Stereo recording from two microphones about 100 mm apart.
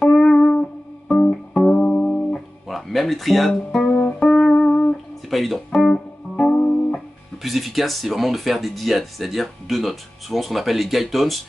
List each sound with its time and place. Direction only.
0.0 s music: 5° left (ahead or behind)
2.7 s speech: centre (ahead or behind)
4.2 s music: 5° left (ahead or behind)
5.3 s guitar: centre (ahead or behind)
7.4 s speech: centre (ahead or behind)